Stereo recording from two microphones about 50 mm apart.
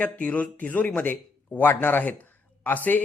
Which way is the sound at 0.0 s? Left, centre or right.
Left.